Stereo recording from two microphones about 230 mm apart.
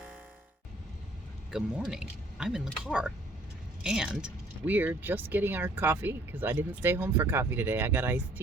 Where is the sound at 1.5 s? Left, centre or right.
Centre.